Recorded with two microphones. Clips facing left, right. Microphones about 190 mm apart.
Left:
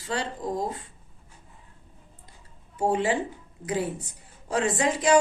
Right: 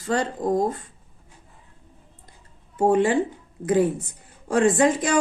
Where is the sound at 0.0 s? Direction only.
45° right (ahead or behind).